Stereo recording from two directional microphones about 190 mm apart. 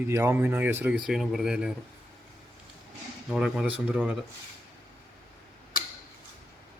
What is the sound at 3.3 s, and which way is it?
Speech, centre (ahead or behind).